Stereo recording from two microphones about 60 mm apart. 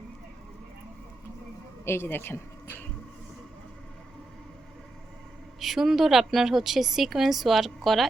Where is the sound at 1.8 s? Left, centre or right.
Left.